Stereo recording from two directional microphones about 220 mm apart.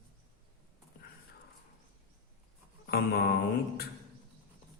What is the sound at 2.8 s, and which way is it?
Music, 45° left (ahead or behind).